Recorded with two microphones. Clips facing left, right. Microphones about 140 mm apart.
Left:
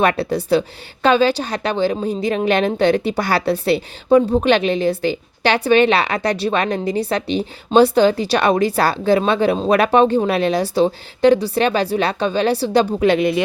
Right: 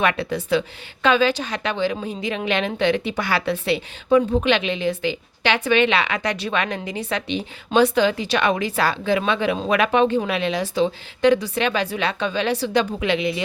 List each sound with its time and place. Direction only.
0.0 s a woman's voice: 35° left (ahead or behind)